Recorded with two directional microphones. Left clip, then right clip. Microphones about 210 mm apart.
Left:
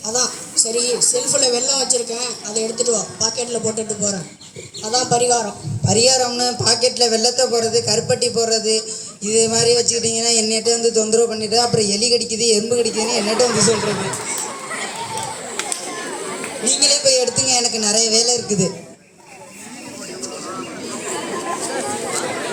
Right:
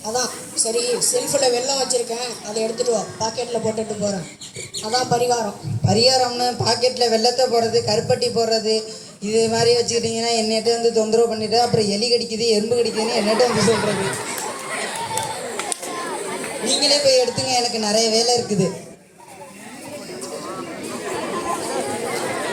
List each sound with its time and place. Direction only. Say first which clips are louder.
0.0 s speech: left 2 dB; 55° left (ahead or behind)
16.6 s music: even; 55° left (ahead or behind)
21.8 s a sound: left 1 dB; 55° left (ahead or behind)